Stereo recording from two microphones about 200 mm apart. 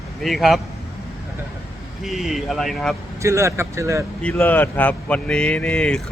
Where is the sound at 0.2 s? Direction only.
Centre (ahead or behind).